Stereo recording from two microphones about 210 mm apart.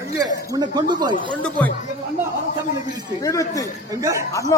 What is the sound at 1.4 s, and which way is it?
Speech, 5° left (ahead or behind).